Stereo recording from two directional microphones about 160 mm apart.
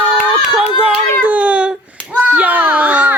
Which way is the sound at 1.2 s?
10° right (ahead or behind).